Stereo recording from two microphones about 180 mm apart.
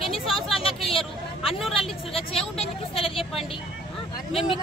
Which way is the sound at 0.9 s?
30° left (ahead or behind).